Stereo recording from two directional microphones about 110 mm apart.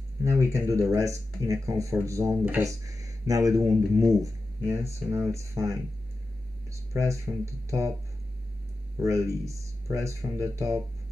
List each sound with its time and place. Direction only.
0.2 s speech: 25° right (ahead or behind)
8.9 s speech: 30° right (ahead or behind)